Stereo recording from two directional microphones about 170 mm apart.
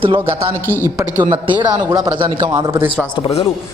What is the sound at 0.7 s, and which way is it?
Speech, 20° left (ahead or behind).